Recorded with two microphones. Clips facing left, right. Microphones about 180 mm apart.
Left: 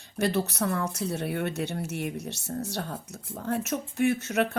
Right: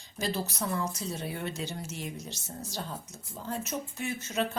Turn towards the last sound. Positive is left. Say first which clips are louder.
# left 8 dB
turn(degrees=65)  # may be behind; listen again after turning